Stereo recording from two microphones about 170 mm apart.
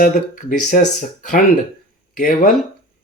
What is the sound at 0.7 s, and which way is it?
Speech, 50° left (ahead or behind).